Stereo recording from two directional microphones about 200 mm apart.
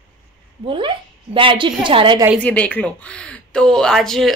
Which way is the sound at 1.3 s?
25° right (ahead or behind).